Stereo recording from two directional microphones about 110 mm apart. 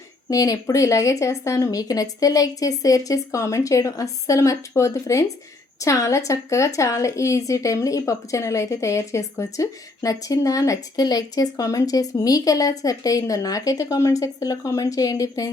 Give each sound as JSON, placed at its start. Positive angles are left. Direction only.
{"t": 0.3, "sound": "speech", "side_deg": 30}